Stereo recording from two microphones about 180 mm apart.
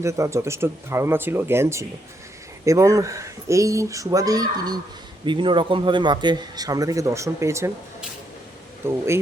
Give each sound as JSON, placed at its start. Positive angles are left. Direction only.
{"t": 0.0, "sound": "speech", "side_deg": -15}
{"t": 8.8, "sound": "speech", "side_deg": -15}